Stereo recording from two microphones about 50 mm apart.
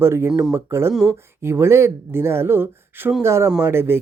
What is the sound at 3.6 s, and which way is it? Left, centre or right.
Speech, right.